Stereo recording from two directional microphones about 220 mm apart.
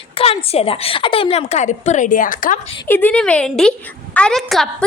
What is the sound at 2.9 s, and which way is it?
A woman's voice, 10° left (ahead or behind).